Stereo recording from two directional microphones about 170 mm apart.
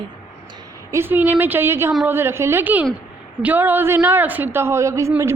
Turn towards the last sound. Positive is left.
turn(degrees=-15)  # may be behind; listen again after turning